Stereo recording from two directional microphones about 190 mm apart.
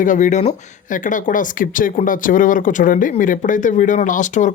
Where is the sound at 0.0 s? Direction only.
40° left (ahead or behind).